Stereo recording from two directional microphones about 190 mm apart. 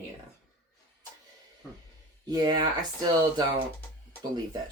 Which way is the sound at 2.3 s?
20° right (ahead or behind).